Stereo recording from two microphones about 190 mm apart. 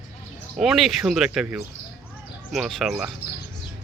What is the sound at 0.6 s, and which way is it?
Speech, centre (ahead or behind).